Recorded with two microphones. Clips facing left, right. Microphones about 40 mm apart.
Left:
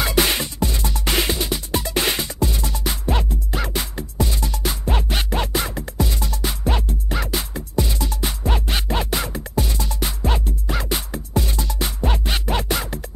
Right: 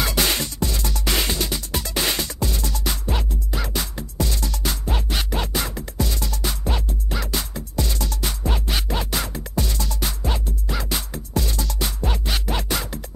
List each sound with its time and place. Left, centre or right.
0.0 s music: centre